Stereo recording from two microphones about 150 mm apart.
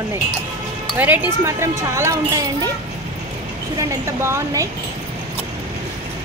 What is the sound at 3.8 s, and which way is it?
Speech, 20° right (ahead or behind).